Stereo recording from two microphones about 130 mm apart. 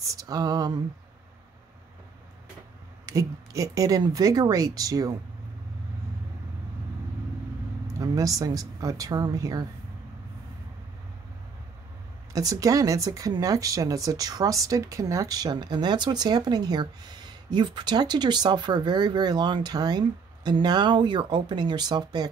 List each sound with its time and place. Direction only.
0.0 s speech: 25° right (ahead or behind)
3.1 s speech: 25° right (ahead or behind)
8.0 s speech: 30° right (ahead or behind)
12.3 s speech: 25° right (ahead or behind)